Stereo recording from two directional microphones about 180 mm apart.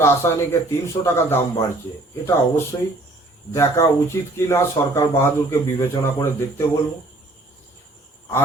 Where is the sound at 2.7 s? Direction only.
20° left (ahead or behind).